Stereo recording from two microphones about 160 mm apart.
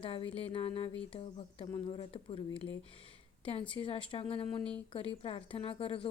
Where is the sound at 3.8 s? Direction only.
30° left (ahead or behind).